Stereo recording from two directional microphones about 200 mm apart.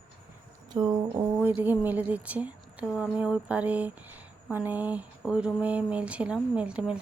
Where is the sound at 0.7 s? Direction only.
20° right (ahead or behind).